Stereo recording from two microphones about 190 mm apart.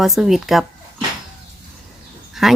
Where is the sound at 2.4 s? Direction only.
Centre (ahead or behind).